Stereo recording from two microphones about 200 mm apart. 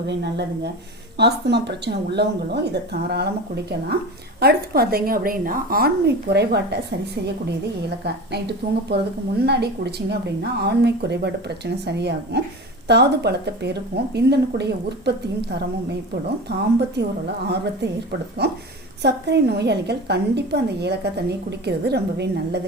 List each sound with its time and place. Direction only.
0.1 s a woman's voice: 55° right (ahead or behind)
7.9 s a woman's voice: 55° right (ahead or behind)
18.4 s a woman's voice: 55° right (ahead or behind)